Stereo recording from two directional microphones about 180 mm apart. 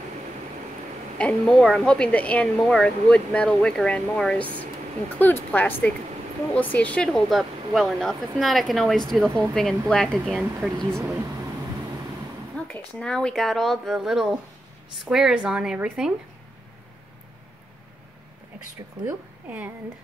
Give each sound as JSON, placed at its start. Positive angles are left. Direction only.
{"t": 1.1, "sound": "a woman's voice", "side_deg": 5}
{"t": 10.7, "sound": "speech", "side_deg": -20}
{"t": 12.5, "sound": "a woman's voice", "side_deg": 5}